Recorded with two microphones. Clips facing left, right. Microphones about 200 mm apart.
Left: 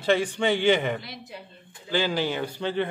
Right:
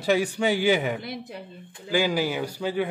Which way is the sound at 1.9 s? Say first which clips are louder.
Right 2 dB; 10° right (ahead or behind).